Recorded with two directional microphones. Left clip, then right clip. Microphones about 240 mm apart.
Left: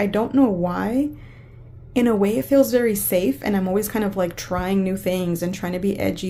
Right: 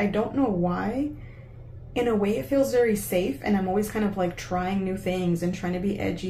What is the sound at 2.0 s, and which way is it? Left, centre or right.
A woman's voice, left.